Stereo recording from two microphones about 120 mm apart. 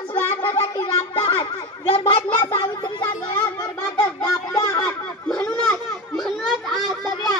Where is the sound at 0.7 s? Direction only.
45° left (ahead or behind).